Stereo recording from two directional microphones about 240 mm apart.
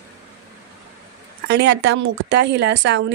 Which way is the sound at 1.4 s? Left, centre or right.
Right.